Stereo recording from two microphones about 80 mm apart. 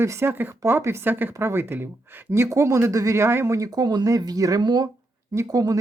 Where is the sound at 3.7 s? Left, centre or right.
Right.